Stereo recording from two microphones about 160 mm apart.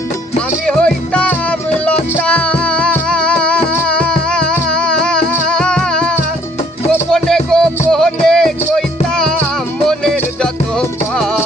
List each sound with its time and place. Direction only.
0.3 s music: 5° left (ahead or behind)